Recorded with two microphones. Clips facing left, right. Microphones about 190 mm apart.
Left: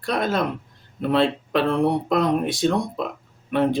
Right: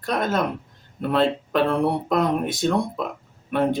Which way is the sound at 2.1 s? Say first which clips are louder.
Left 1 dB; 50° right (ahead or behind).